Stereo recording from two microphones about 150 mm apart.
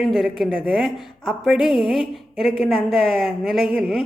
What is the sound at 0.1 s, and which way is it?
Speech, centre (ahead or behind).